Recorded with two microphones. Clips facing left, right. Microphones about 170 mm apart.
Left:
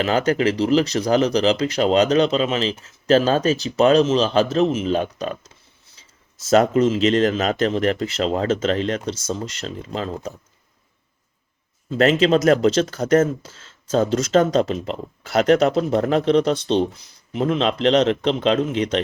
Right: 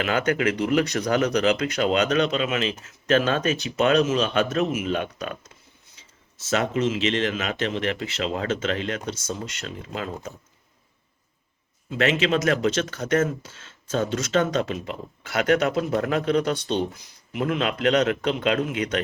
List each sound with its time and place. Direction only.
0.0 s speech: 30° left (ahead or behind)
6.0 s a sound: 35° left (ahead or behind)
6.5 s speech: 40° left (ahead or behind)
11.9 s speech: 35° left (ahead or behind)